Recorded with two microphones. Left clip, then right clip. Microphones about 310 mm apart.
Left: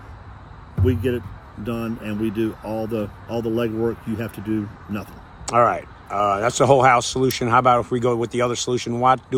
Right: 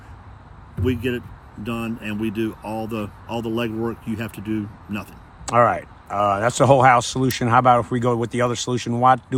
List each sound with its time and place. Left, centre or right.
0.9 s speech: centre
5.5 s speech: right